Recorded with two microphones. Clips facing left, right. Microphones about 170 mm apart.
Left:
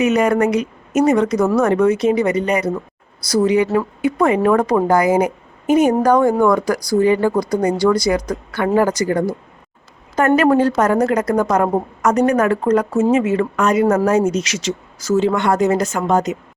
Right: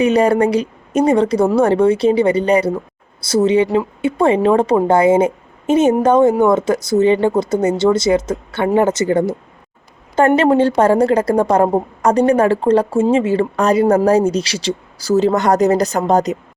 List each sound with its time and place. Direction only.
0.0 s a woman's voice: 30° right (ahead or behind)